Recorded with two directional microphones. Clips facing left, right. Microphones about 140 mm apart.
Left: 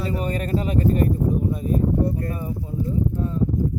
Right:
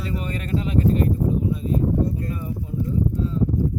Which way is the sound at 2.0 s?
55° left (ahead or behind).